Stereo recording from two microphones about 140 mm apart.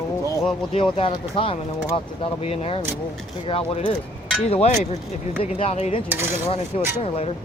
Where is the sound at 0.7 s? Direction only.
40° left (ahead or behind).